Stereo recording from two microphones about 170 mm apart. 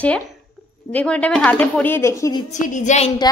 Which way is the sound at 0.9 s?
5° left (ahead or behind).